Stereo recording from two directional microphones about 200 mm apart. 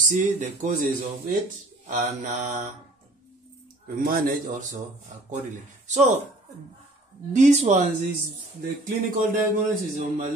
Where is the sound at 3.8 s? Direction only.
50° right (ahead or behind).